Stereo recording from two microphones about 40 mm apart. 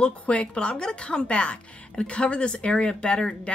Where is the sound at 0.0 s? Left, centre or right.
Left.